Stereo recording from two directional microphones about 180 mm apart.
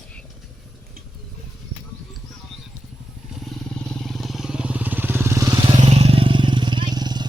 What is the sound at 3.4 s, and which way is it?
Motorcycle, 5° left (ahead or behind).